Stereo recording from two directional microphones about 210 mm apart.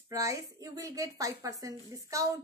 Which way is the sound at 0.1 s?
15° right (ahead or behind).